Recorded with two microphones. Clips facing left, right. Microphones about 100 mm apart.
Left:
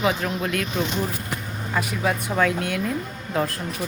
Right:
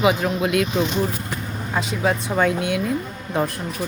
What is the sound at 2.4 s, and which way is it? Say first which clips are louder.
Speech: right 2 dB; 10° right (ahead or behind).